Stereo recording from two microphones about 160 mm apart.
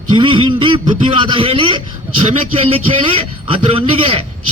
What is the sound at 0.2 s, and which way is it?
A man's voice, 30° right (ahead or behind).